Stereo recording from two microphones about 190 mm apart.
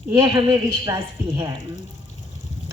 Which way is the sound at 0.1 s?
20° right (ahead or behind).